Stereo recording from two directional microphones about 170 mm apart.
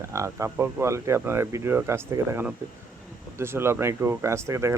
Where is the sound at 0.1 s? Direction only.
15° right (ahead or behind).